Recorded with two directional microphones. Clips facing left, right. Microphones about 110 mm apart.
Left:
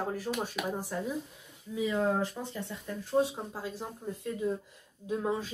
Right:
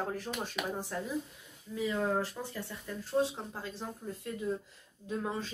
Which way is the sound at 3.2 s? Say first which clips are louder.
Left 2 dB; 10° left (ahead or behind).